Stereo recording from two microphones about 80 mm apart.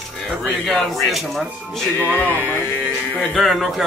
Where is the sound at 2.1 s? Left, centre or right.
Left.